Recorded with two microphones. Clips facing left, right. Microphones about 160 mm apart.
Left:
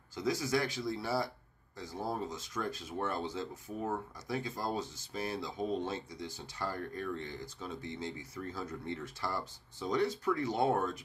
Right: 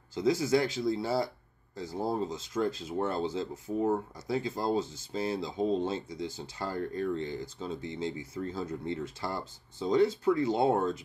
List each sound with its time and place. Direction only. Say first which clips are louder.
0.1 s speech: right 6 dB; 25° right (ahead or behind)